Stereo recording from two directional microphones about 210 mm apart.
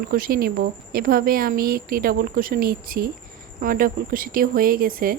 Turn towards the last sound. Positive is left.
turn(degrees=-45)  # may be behind; listen again after turning